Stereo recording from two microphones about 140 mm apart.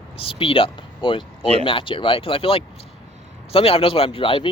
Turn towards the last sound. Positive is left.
turn(degrees=40)  # may be behind; listen again after turning